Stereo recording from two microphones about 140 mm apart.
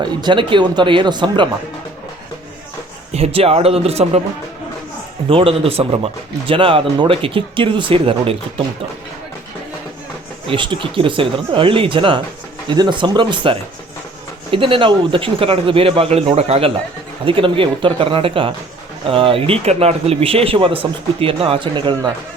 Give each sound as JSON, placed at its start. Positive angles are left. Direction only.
{"t": 0.0, "sound": "speech", "side_deg": -35}
{"t": 3.1, "sound": "speech", "side_deg": -45}
{"t": 5.3, "sound": "speech", "side_deg": -40}
{"t": 10.4, "sound": "speech", "side_deg": -40}